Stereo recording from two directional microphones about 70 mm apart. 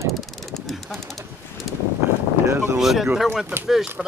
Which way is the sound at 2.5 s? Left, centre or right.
Right.